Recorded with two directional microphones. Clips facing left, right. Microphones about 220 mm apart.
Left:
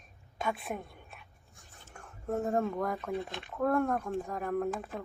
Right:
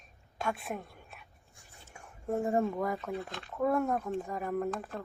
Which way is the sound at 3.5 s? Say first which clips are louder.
Even; 5° right (ahead or behind).